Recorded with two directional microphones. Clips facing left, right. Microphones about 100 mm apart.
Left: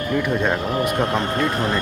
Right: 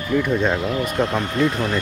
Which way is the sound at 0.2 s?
5° left (ahead or behind).